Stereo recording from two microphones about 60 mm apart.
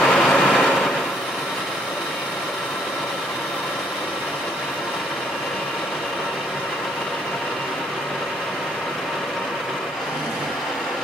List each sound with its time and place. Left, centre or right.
0.0 s vehicle: centre